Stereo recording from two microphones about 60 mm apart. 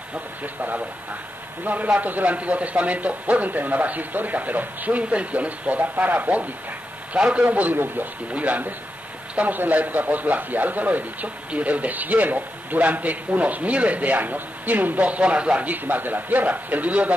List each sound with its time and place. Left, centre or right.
0.4 s a man's voice: right
7.4 s a man's voice: right